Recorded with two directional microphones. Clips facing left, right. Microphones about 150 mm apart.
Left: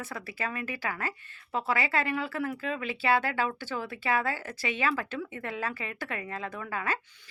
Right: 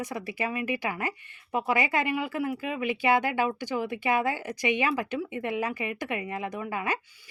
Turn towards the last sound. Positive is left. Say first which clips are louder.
# right 3 dB
turn(degrees=-15)  # may be behind; listen again after turning